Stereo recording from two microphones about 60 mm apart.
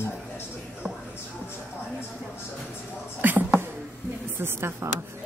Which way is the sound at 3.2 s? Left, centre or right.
Right.